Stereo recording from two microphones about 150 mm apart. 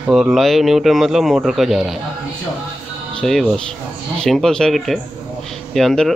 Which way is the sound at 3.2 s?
Centre (ahead or behind).